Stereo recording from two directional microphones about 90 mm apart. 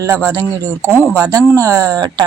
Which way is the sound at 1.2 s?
40° right (ahead or behind).